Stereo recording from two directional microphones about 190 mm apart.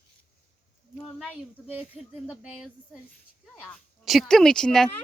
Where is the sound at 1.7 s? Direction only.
5° right (ahead or behind).